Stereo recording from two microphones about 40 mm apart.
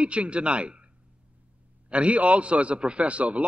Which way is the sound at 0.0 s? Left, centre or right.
Right.